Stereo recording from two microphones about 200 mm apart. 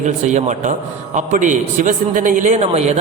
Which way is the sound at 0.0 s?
35° right (ahead or behind).